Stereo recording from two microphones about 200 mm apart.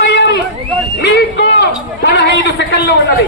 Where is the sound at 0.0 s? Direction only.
60° left (ahead or behind).